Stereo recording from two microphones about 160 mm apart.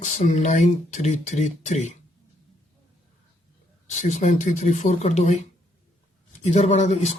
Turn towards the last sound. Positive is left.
turn(degrees=45)  # may be behind; listen again after turning